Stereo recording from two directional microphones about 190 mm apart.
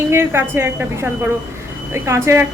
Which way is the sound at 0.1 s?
10° right (ahead or behind).